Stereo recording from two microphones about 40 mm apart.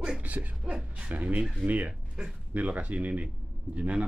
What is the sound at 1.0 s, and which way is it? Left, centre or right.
Speech, right.